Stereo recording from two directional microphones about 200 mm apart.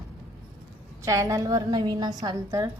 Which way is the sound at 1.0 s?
15° right (ahead or behind).